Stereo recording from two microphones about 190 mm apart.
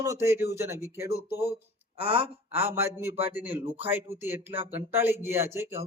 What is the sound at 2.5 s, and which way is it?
Speech, 10° right (ahead or behind).